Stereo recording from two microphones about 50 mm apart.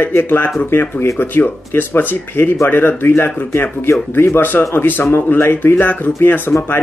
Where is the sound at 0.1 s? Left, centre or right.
Left.